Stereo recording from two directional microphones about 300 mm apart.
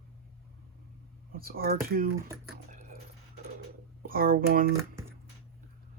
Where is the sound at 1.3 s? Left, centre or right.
Right.